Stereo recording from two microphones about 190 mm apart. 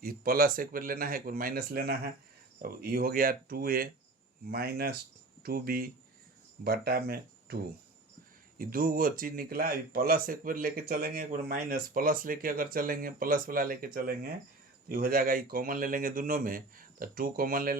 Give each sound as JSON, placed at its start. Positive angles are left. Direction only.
{"t": 0.0, "sound": "speech", "side_deg": -50}